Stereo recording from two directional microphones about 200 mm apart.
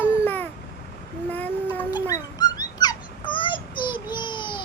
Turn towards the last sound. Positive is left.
turn(degrees=25)  # may be behind; listen again after turning